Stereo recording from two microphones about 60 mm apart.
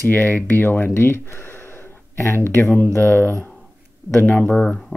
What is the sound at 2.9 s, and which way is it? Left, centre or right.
Speech, left.